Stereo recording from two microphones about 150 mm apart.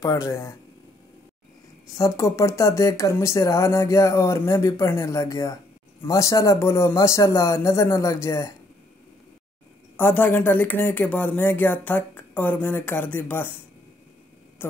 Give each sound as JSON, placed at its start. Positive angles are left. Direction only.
{"t": 0.0, "sound": "speech", "side_deg": 20}
{"t": 2.0, "sound": "speech", "side_deg": 20}
{"t": 9.9, "sound": "speech", "side_deg": 15}